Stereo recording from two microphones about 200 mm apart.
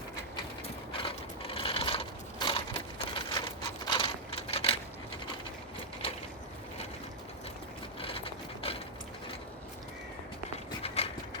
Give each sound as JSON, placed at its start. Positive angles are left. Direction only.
{"t": 0.9, "sound": "mechanisms", "side_deg": 25}
{"t": 8.0, "sound": "mechanisms", "side_deg": 30}
{"t": 10.8, "sound": "mechanisms", "side_deg": 30}